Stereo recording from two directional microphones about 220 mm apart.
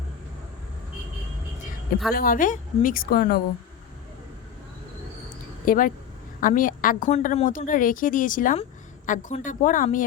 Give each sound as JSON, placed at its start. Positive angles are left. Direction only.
{"t": 2.1, "sound": "a woman's voice", "side_deg": 40}
{"t": 5.6, "sound": "a woman's voice", "side_deg": 40}